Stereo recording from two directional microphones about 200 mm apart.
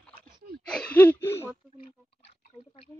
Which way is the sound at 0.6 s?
5° left (ahead or behind).